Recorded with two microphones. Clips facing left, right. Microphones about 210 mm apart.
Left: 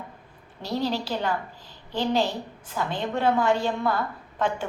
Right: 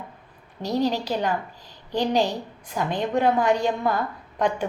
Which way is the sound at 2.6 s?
15° right (ahead or behind).